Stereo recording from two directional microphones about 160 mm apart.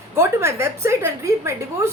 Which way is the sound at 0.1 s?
15° right (ahead or behind).